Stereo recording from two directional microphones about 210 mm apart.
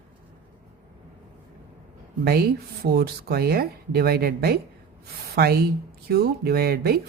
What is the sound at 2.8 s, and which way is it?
Speech, 45° right (ahead or behind).